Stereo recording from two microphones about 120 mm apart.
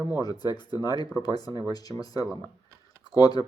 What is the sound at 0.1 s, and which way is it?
Speech, 35° left (ahead or behind).